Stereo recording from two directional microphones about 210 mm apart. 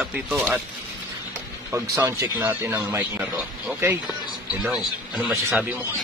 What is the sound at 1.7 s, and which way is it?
Speech, 10° right (ahead or behind).